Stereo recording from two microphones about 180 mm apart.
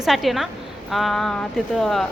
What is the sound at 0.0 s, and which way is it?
A woman's voice, centre (ahead or behind).